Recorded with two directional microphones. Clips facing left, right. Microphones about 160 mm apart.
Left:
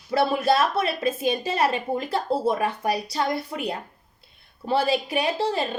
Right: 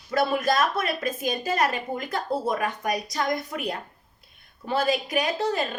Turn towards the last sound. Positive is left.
turn(degrees=30)  # may be behind; listen again after turning